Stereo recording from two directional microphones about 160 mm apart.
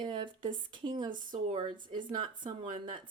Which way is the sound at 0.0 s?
30° right (ahead or behind).